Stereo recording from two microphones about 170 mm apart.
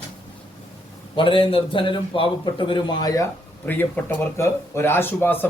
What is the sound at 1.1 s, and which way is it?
A man's voice, 30° left (ahead or behind).